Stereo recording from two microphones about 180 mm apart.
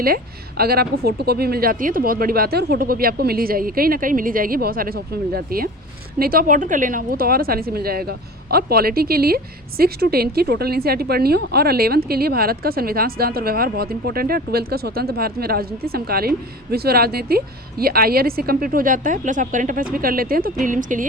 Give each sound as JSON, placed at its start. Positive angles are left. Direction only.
{"t": 0.0, "sound": "a woman's voice", "side_deg": -55}